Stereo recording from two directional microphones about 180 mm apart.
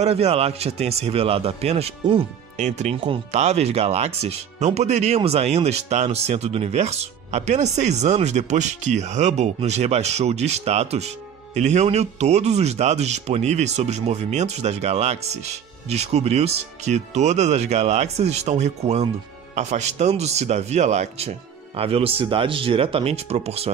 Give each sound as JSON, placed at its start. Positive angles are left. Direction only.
{"t": 0.0, "sound": "speech", "side_deg": -35}